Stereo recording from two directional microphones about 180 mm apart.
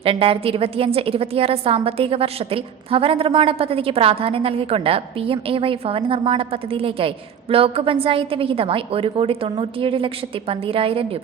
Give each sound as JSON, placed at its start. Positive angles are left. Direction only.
{"t": 0.0, "sound": "a woman's voice", "side_deg": -30}